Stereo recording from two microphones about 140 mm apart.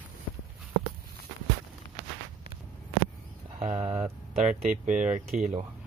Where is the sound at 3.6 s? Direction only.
55° right (ahead or behind).